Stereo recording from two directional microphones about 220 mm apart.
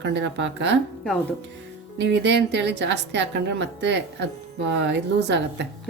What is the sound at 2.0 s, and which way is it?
A woman's voice, 55° right (ahead or behind).